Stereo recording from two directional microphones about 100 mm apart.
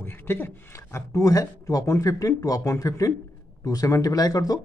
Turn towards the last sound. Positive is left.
turn(degrees=40)  # may be behind; listen again after turning